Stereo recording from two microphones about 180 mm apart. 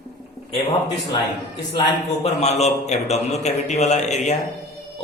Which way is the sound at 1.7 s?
35° left (ahead or behind).